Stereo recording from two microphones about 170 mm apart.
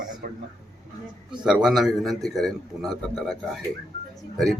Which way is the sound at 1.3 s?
5° right (ahead or behind).